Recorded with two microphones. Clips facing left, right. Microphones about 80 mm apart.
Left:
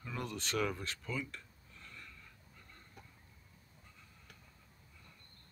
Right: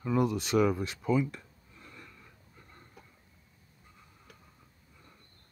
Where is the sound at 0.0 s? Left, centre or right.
Centre.